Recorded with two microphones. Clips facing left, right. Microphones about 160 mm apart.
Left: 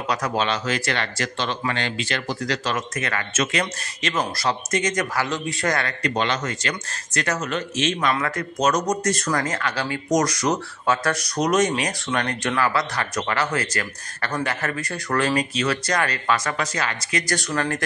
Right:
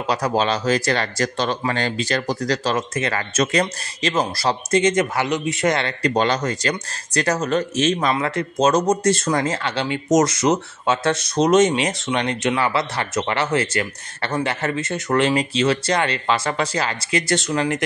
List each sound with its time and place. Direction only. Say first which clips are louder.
0.0 s speech: right 4 dB; 30° right (ahead or behind)
8.1 s speech: right 3 dB; 25° right (ahead or behind)